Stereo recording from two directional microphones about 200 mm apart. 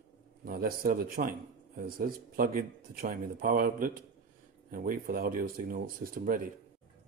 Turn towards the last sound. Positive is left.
turn(degrees=-45)  # may be behind; listen again after turning